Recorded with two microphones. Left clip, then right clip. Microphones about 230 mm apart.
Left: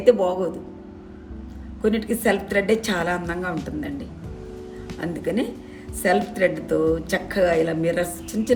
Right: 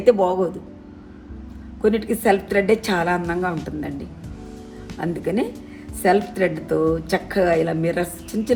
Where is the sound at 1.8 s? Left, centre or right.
Centre.